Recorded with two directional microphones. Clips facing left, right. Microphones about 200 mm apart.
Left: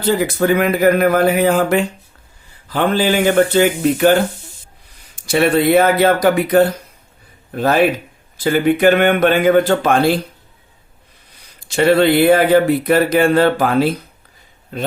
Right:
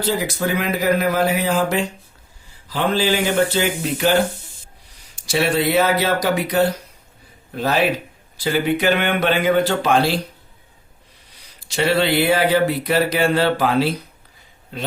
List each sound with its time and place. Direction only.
0.0 s speech: 55° left (ahead or behind)
11.7 s speech: 50° left (ahead or behind)